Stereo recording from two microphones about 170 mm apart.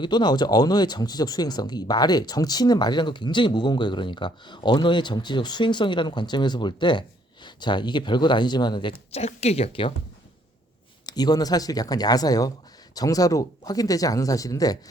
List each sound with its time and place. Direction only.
0.0 s speech: 25° left (ahead or behind)
11.0 s speech: 25° left (ahead or behind)